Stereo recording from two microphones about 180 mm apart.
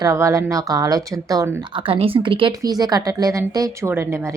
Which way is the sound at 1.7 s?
30° right (ahead or behind).